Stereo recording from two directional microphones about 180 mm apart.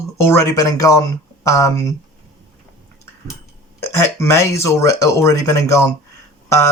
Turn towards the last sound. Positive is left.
turn(degrees=15)  # may be behind; listen again after turning